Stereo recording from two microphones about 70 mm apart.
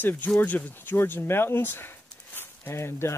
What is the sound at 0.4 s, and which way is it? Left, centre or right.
Speech, left.